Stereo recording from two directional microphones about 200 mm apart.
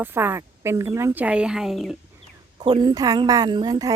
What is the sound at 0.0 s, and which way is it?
A woman's voice, 10° right (ahead or behind).